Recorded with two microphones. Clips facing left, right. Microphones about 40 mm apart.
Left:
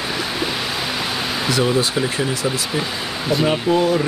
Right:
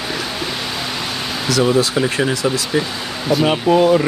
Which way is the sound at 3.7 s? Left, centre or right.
Right.